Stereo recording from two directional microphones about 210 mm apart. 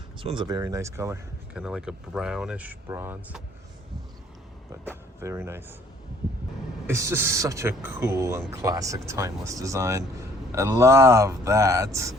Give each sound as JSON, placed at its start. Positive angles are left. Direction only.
{"t": 0.2, "sound": "speech", "side_deg": -25}
{"t": 4.9, "sound": "speech", "side_deg": -10}
{"t": 6.8, "sound": "speech", "side_deg": -10}